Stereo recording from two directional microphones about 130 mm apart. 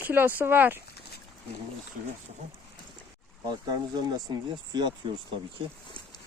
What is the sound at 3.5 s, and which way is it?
Speech, 30° right (ahead or behind).